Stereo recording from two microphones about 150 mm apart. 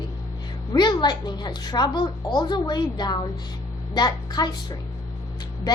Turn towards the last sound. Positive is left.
turn(degrees=25)  # may be behind; listen again after turning